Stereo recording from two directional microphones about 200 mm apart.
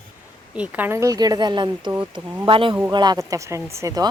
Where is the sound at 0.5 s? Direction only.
5° right (ahead or behind).